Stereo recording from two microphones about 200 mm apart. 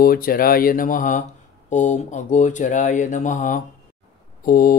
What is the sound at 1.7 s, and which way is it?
Speech, 40° left (ahead or behind).